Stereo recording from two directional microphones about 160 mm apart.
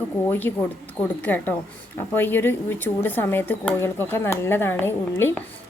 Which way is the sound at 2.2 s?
15° left (ahead or behind).